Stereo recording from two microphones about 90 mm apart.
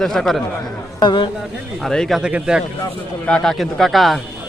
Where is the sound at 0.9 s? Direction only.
60° left (ahead or behind).